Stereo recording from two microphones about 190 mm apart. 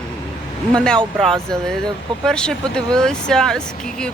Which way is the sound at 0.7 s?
5° left (ahead or behind).